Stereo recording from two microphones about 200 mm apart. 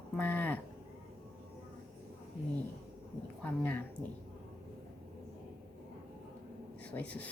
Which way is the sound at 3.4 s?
10° left (ahead or behind).